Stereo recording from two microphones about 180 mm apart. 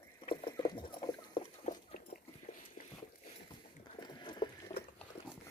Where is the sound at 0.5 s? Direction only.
25° left (ahead or behind).